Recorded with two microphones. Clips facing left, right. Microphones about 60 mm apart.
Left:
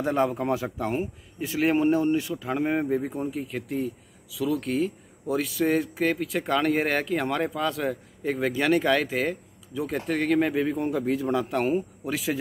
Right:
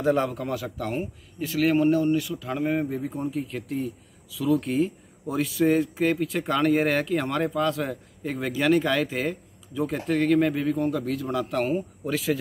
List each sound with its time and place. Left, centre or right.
0.0 s speech: centre
0.4 s speech: left
1.7 s a man's voice: left; by 12.4 s centre